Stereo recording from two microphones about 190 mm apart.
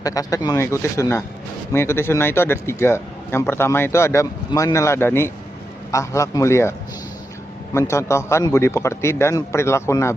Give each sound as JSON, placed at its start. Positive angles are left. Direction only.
{"t": 0.0, "sound": "speech", "side_deg": 20}